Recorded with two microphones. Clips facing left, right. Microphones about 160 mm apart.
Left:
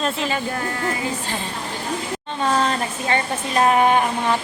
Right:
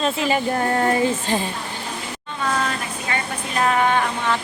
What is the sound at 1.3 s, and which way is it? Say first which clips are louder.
Speech: right 6 dB; 20° right (ahead or behind).